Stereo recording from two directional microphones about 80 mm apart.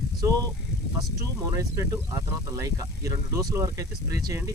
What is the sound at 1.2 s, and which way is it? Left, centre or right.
Speech, right.